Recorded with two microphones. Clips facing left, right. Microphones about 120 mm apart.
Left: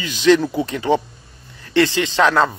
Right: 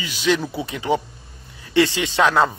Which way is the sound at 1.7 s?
15° right (ahead or behind).